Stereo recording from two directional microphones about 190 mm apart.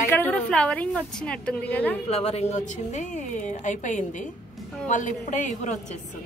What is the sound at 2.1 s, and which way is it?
A woman's voice, 30° left (ahead or behind).